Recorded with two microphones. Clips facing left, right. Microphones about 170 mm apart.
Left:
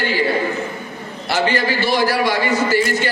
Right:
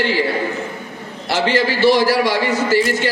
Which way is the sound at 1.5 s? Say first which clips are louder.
Right 9 dB; 90° right.